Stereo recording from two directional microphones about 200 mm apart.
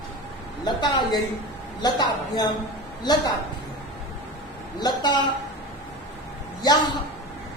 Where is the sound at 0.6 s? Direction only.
20° left (ahead or behind).